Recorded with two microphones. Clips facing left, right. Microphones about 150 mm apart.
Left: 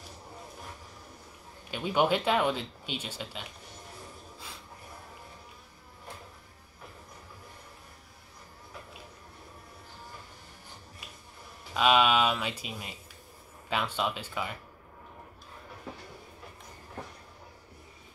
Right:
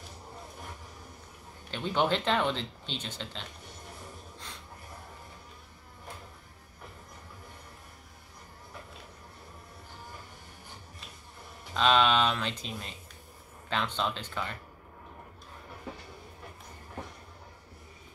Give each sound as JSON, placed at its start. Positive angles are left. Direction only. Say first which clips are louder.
{"t": 1.7, "sound": "speech", "louder": "left 2 dB", "side_deg": 10}
{"t": 11.7, "sound": "speech", "louder": "left 1 dB", "side_deg": 10}